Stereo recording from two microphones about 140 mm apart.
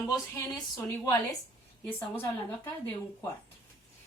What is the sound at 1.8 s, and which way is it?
Speech, 15° left (ahead or behind).